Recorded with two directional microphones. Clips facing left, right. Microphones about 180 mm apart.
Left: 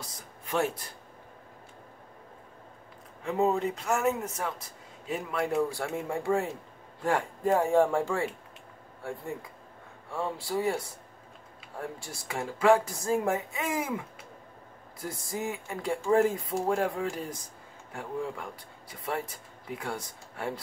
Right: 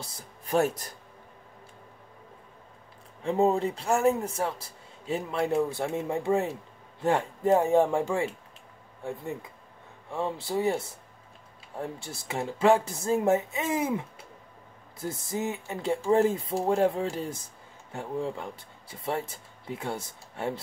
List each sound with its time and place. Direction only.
0.0 s speech: 35° right (ahead or behind)
3.2 s a man's voice: 30° right (ahead or behind)